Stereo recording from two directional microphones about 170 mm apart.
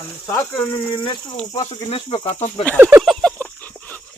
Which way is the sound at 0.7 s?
25° left (ahead or behind).